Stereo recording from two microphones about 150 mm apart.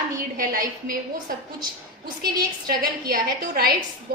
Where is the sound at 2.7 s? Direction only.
85° right.